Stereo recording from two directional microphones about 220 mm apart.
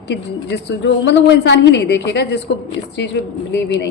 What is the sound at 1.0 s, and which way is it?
A woman's voice, 55° left (ahead or behind).